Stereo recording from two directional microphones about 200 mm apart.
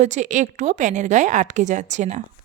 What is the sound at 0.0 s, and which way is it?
A woman's voice, 35° right (ahead or behind).